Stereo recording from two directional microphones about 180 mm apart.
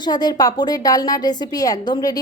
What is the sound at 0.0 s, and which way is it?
A woman's voice, 20° left (ahead or behind).